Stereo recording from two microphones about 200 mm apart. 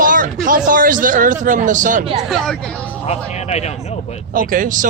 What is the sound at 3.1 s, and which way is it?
Speech, 35° left (ahead or behind).